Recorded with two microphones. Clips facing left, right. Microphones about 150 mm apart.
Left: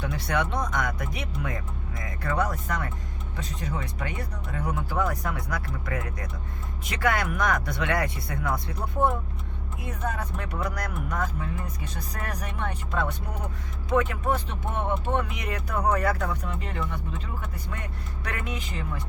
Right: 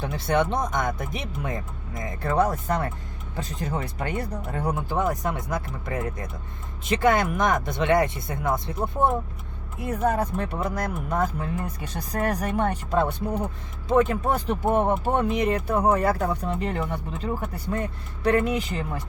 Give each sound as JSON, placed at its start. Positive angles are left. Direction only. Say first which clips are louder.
{"t": 0.0, "sound": "speech", "louder": "right 4 dB", "side_deg": -25}